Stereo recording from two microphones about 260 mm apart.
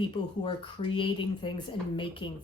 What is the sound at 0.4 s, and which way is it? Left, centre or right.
A woman's voice, centre.